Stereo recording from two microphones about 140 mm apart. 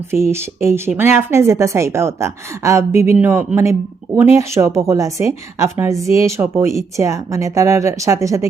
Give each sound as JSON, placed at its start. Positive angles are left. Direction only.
{"t": 0.1, "sound": "a woman's voice", "side_deg": -20}